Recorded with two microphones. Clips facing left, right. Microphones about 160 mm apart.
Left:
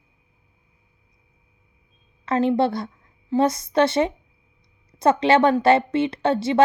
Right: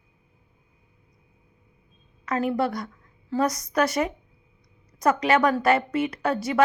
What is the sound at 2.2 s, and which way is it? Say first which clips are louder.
A woman's voice: left 5 dB; 25° left (ahead or behind).